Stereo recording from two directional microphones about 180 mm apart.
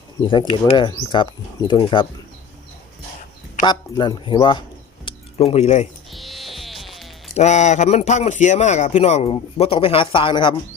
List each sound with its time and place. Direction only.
0.3 s speech: 25° left (ahead or behind)
3.6 s speech: 25° left (ahead or behind)
6.1 s music: centre (ahead or behind)
7.3 s a man's voice: 40° left (ahead or behind)